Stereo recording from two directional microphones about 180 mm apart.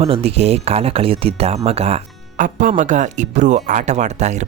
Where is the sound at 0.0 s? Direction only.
35° right (ahead or behind).